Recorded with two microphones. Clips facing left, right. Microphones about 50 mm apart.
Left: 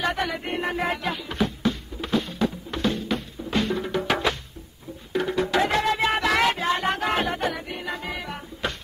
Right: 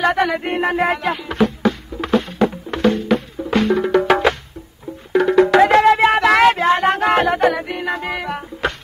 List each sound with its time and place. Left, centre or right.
0.0 s music: right
5.1 s music: right